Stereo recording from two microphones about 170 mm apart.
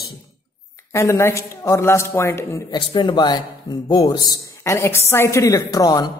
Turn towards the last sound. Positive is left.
turn(degrees=25)  # may be behind; listen again after turning